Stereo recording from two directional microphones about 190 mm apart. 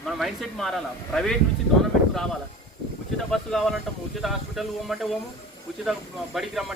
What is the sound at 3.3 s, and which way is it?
Speech, 5° left (ahead or behind).